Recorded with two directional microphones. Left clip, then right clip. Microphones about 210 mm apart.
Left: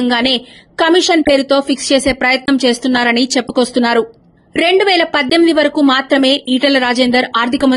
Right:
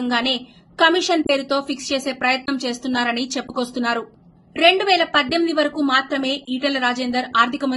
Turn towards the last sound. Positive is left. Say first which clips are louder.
# left 5 dB
turn(degrees=40)  # may be behind; listen again after turning